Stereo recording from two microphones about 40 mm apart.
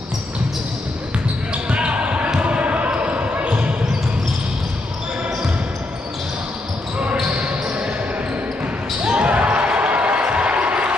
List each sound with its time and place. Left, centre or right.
1.5 s basketball bounce: right
7.2 s basketball bounce: right
9.0 s basketball bounce: right